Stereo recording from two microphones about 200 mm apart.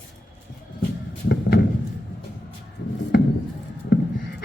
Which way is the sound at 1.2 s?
50° left (ahead or behind).